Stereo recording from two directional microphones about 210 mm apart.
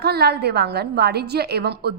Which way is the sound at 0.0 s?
50° right (ahead or behind).